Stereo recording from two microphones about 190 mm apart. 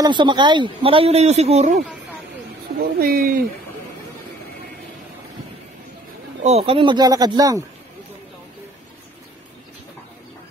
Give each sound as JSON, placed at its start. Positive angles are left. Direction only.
{"t": 0.0, "sound": "a man's voice", "side_deg": -25}
{"t": 2.8, "sound": "speech", "side_deg": -50}
{"t": 6.4, "sound": "speech", "side_deg": -30}